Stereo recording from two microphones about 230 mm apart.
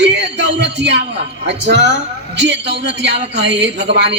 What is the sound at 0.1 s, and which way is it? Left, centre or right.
Music, right.